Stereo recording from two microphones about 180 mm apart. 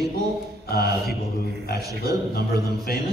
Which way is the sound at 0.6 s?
60° left (ahead or behind).